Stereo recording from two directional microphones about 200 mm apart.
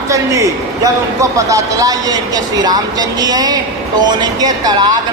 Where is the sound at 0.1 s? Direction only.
15° right (ahead or behind).